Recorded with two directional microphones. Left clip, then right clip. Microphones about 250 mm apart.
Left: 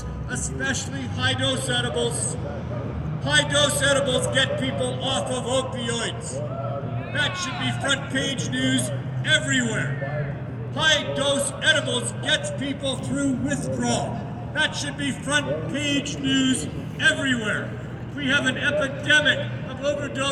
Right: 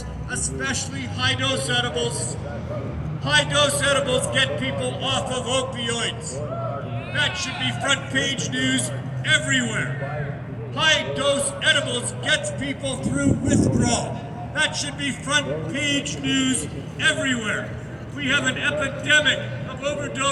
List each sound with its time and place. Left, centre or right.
0.3 s a man's voice: centre
3.2 s a man's voice: centre